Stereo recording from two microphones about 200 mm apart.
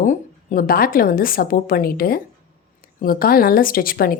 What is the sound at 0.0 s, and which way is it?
A woman's voice, 45° left (ahead or behind).